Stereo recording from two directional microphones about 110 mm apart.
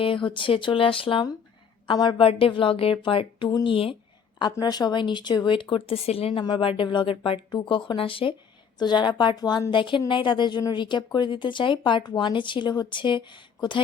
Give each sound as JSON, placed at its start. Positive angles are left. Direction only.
{"t": 0.0, "sound": "a woman's voice", "side_deg": 50}
{"t": 1.9, "sound": "a woman's voice", "side_deg": 45}
{"t": 2.2, "sound": "a woman's voice", "side_deg": 55}
{"t": 4.6, "sound": "a woman's voice", "side_deg": 40}
{"t": 6.4, "sound": "a woman's voice", "side_deg": 45}
{"t": 8.8, "sound": "a woman's voice", "side_deg": 40}